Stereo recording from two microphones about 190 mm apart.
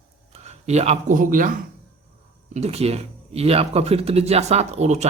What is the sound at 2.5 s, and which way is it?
Speech, 35° right (ahead or behind).